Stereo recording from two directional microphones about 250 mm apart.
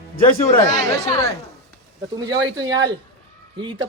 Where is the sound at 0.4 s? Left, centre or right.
Left.